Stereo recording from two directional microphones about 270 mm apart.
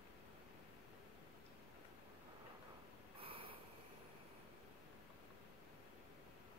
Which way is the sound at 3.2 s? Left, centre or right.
Centre.